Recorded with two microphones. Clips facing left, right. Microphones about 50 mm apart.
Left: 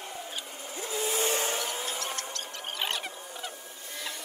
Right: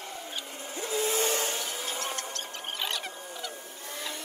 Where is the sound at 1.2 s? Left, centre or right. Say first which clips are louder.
Left 1 dB; left.